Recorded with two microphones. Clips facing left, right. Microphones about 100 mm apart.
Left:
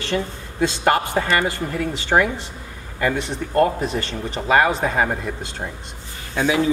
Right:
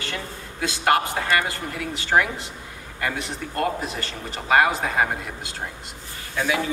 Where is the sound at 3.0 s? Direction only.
Centre (ahead or behind).